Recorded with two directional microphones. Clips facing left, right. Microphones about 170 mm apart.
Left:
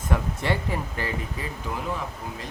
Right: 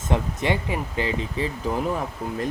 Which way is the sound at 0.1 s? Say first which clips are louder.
Right 3 dB; 20° right (ahead or behind).